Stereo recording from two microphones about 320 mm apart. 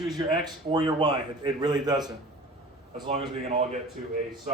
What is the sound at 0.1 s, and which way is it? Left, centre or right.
A man's voice, centre.